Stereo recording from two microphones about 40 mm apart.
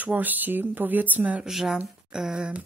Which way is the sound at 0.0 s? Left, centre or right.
Right.